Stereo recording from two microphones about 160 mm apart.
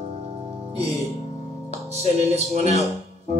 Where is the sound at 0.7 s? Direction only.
40° right (ahead or behind).